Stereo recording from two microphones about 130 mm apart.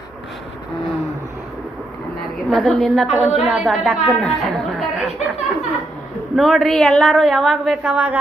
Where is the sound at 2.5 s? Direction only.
Centre (ahead or behind).